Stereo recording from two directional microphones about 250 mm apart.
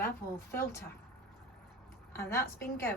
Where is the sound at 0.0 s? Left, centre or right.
Centre.